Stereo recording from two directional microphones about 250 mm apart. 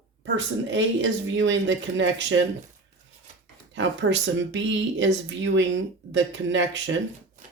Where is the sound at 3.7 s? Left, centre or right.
Right.